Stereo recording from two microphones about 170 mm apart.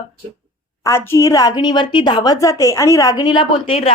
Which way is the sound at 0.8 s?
15° left (ahead or behind).